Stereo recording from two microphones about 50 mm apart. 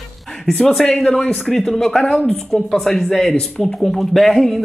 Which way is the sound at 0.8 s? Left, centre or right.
Centre.